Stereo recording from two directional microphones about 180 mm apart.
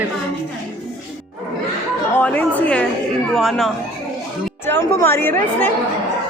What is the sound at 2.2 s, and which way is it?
A woman's voice, 10° left (ahead or behind).